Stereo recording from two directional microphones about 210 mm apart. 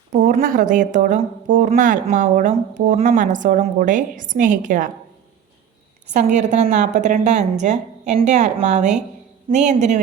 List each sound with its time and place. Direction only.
0.1 s a woman's voice: 35° right (ahead or behind)
6.1 s a woman's voice: 35° right (ahead or behind)